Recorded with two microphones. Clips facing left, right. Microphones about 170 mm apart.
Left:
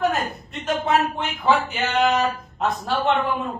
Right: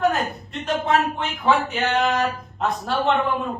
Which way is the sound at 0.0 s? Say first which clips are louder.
Right 1 dB; centre (ahead or behind).